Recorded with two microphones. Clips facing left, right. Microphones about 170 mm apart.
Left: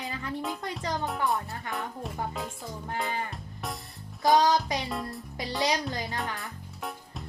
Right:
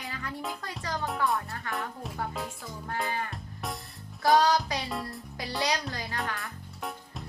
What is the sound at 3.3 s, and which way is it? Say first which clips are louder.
Music: even; centre (ahead or behind).